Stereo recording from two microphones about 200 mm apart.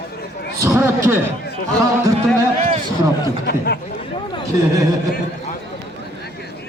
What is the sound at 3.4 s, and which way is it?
Speech, 55° left (ahead or behind).